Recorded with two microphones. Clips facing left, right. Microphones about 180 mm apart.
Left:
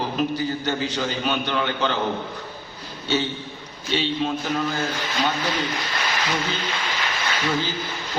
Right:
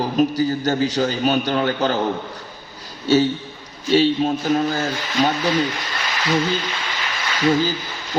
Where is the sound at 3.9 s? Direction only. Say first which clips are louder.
Right 7 dB; 40° right (ahead or behind).